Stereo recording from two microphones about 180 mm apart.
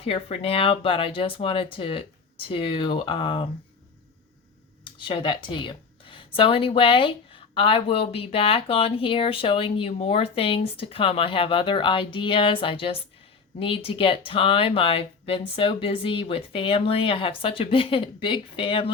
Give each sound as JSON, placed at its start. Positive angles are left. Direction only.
{"t": 0.0, "sound": "speech", "side_deg": 30}
{"t": 4.8, "sound": "speech", "side_deg": 30}